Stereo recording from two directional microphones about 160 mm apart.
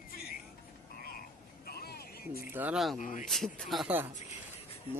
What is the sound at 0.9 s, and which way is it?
Frog, 65° left (ahead or behind).